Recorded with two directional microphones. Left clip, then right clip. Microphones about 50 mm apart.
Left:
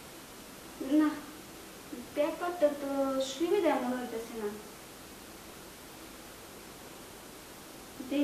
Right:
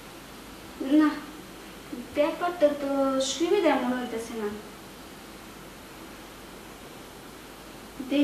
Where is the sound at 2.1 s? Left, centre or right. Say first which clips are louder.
Right 6 dB; centre.